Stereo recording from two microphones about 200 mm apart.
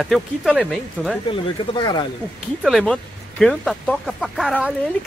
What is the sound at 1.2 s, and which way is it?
Speech, 25° left (ahead or behind).